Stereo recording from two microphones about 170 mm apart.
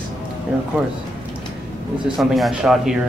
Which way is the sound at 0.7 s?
5° right (ahead or behind).